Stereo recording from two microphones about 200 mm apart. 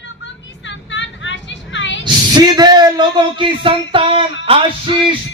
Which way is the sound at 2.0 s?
20° right (ahead or behind).